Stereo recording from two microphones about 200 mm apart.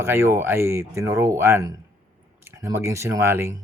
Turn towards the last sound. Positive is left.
turn(degrees=-10)  # may be behind; listen again after turning